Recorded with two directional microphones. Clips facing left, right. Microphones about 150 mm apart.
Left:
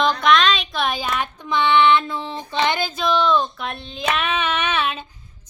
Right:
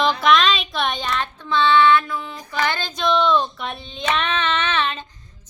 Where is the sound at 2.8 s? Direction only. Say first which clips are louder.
Even; centre (ahead or behind).